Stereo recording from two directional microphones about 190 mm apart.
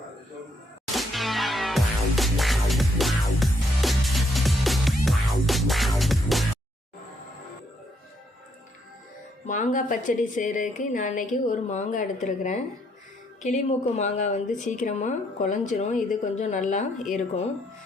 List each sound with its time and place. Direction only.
0.9 s music: centre (ahead or behind)
9.5 s a woman's voice: 40° left (ahead or behind)